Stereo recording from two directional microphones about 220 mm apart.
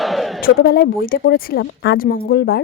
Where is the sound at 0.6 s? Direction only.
45° left (ahead or behind).